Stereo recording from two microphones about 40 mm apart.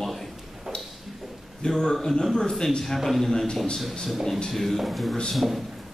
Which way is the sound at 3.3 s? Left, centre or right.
Centre.